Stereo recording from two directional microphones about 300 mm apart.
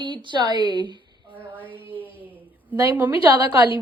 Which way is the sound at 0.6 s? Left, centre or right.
Centre.